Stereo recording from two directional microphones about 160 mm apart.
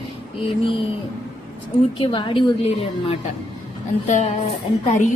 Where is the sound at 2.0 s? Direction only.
30° left (ahead or behind).